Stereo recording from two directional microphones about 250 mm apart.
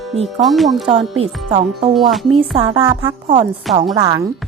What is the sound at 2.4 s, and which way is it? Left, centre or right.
Speech, centre.